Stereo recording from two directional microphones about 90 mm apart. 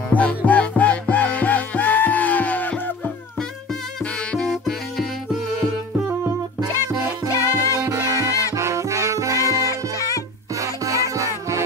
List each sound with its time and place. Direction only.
0.1 s music: 15° left (ahead or behind)
4.0 s music: 15° left (ahead or behind)
4.5 s music: centre (ahead or behind)
7.3 s music: 30° left (ahead or behind)
8.5 s music: 35° right (ahead or behind)
9.7 s music: 40° left (ahead or behind)
10.6 s music: 40° right (ahead or behind)